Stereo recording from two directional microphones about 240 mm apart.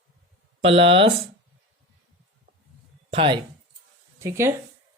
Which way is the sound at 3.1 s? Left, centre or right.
Right.